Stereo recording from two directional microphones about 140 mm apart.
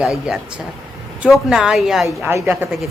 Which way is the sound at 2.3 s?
15° right (ahead or behind).